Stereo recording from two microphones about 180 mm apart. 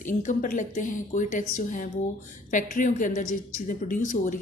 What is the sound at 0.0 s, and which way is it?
Speech, 45° left (ahead or behind).